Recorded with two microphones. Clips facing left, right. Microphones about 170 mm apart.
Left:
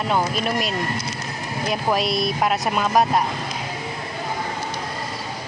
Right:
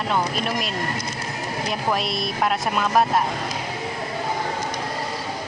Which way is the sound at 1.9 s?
Centre (ahead or behind).